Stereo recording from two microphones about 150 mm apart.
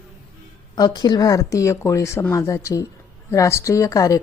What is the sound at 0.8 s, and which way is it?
Speech, 30° left (ahead or behind).